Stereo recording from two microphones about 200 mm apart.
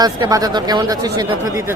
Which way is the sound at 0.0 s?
20° right (ahead or behind).